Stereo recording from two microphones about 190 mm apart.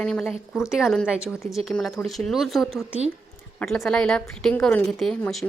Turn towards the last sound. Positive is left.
turn(degrees=5)  # may be behind; listen again after turning